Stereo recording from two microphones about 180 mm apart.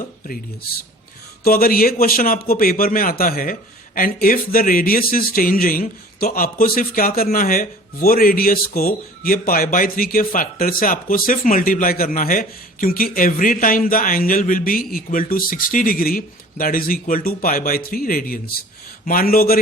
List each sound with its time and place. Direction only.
1.5 s a man's voice: 55° left (ahead or behind)